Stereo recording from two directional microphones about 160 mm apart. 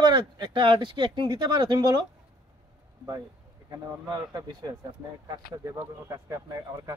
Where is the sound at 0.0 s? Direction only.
25° right (ahead or behind).